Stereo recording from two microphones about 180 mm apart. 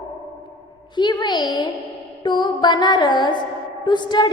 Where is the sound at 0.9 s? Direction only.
25° left (ahead or behind).